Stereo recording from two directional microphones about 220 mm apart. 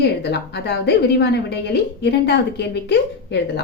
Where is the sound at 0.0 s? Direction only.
50° left (ahead or behind).